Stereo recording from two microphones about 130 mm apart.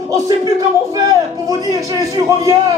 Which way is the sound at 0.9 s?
25° right (ahead or behind).